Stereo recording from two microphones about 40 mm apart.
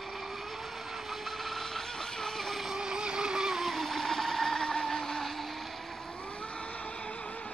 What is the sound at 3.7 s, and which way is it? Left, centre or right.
Vehicle, centre.